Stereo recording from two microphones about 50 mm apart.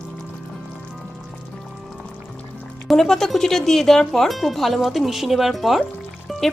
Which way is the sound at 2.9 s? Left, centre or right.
Centre.